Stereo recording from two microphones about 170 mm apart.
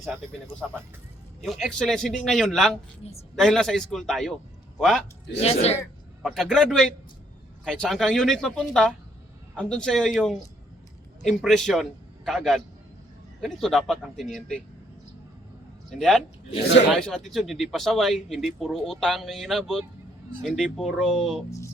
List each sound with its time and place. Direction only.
1.4 s speech: centre (ahead or behind)
3.0 s speech: 40° left (ahead or behind)
3.3 s speech: 5° left (ahead or behind)
5.4 s speech: 35° left (ahead or behind)
6.2 s a man's voice: centre (ahead or behind)
15.9 s speech: centre (ahead or behind)